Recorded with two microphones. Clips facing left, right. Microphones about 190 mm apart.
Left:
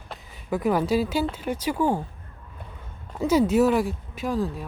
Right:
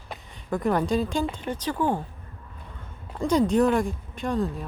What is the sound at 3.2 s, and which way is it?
Speech, 5° left (ahead or behind).